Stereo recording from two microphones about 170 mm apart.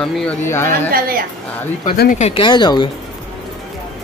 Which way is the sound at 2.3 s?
30° left (ahead or behind).